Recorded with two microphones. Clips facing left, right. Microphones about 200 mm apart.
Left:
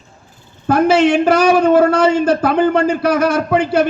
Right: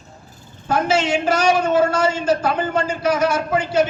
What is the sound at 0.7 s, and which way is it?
A man's voice, 60° left (ahead or behind).